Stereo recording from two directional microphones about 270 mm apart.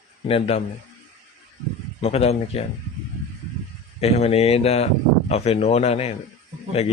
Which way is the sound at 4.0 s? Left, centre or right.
Left.